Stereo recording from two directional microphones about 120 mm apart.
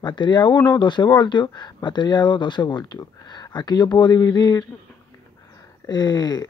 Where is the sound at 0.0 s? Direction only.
40° left (ahead or behind).